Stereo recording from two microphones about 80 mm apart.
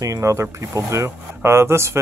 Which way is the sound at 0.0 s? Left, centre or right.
Right.